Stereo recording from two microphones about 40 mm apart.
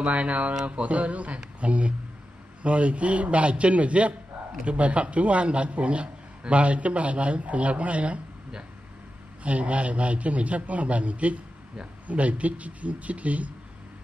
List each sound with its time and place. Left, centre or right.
0.0 s a man's voice: right
9.4 s a man's voice: right